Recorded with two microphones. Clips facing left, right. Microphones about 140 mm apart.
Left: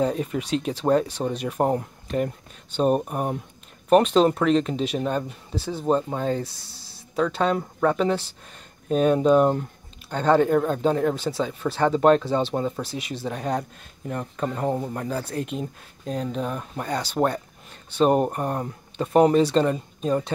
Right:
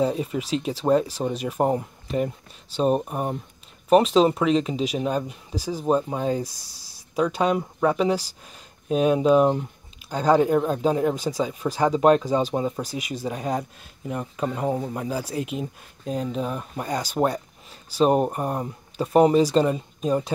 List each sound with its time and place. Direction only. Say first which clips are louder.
0.0 s speech: even; centre (ahead or behind)
6.5 s speech: left 2 dB; 40° right (ahead or behind)
6.9 s speech: right 1 dB; 10° right (ahead or behind)